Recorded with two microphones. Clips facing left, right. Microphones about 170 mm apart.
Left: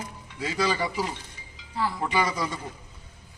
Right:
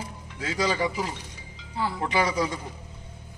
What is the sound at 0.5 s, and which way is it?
Speech, 10° right (ahead or behind).